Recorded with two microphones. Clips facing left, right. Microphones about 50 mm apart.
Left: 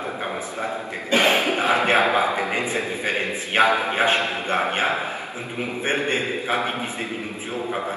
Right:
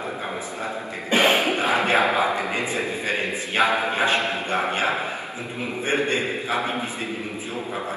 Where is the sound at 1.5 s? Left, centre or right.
Left.